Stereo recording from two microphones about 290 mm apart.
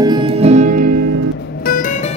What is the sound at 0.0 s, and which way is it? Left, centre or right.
Music, centre.